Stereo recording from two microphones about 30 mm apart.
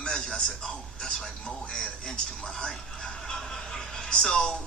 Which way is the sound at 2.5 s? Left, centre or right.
Centre.